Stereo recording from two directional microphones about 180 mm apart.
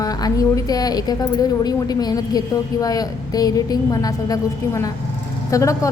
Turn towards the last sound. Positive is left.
turn(degrees=15)  # may be behind; listen again after turning